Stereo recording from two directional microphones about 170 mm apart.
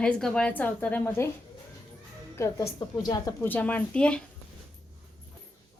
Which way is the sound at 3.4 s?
10° left (ahead or behind).